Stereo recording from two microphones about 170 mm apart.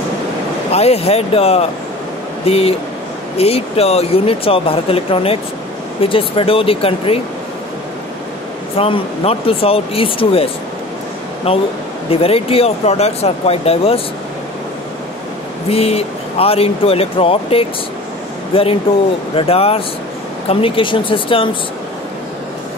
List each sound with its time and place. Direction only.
0.7 s speech: 35° left (ahead or behind)
8.7 s speech: 35° left (ahead or behind)
15.7 s speech: 35° left (ahead or behind)